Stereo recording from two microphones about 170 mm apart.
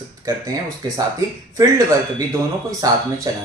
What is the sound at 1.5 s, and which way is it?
Speech, 20° right (ahead or behind).